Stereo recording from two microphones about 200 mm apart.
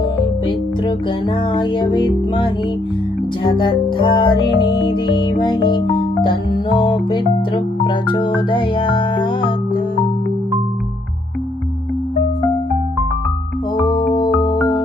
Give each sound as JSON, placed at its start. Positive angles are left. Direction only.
{"t": 1.5, "sound": "music", "side_deg": 25}
{"t": 13.7, "sound": "music", "side_deg": 20}